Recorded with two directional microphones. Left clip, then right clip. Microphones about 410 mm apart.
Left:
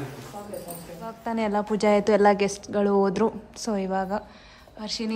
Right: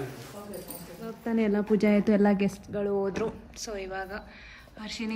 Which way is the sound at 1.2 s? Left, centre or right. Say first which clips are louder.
Left 2 dB; centre.